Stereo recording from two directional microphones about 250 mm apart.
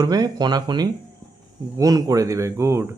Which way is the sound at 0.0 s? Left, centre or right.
Centre.